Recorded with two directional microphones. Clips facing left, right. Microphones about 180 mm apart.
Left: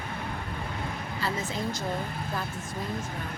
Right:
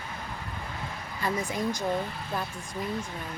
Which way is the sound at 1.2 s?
15° right (ahead or behind).